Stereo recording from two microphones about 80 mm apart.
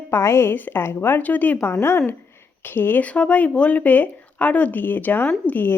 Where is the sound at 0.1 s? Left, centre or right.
Left.